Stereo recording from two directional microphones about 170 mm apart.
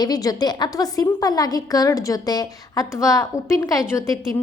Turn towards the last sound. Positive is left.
turn(degrees=20)  # may be behind; listen again after turning